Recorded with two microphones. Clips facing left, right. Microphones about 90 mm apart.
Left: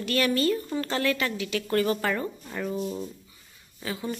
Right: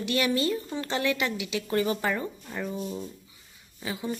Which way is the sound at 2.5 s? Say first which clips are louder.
Left 4 dB; centre (ahead or behind).